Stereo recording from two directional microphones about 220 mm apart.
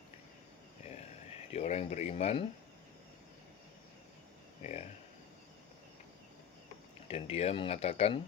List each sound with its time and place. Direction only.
1.5 s speech: 30° left (ahead or behind)
4.6 s speech: 30° left (ahead or behind)
7.1 s speech: 25° left (ahead or behind)